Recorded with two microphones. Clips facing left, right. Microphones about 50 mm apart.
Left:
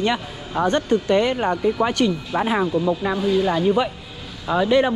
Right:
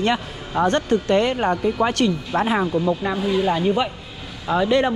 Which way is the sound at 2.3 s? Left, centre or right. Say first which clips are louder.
Right 2 dB; right.